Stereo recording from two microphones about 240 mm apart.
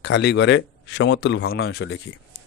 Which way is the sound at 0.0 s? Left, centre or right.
Left.